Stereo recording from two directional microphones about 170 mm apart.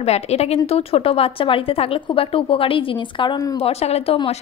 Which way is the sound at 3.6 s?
40° left (ahead or behind).